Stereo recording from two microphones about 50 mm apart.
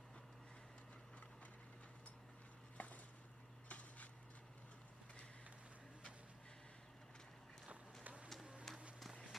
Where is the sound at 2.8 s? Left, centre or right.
Left.